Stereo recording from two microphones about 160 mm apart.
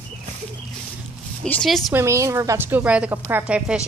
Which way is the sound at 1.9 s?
20° right (ahead or behind).